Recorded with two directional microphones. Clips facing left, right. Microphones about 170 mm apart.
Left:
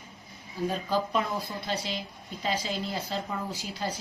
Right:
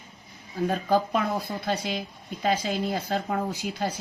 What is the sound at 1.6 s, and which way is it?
A woman's voice, 50° right (ahead or behind).